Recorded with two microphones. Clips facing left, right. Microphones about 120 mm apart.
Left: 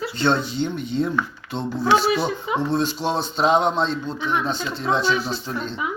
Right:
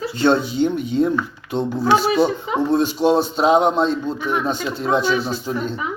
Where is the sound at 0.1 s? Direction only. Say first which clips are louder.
Right 5 dB; 10° right (ahead or behind).